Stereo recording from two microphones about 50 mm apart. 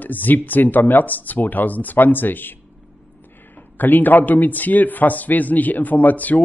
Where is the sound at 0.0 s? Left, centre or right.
Left.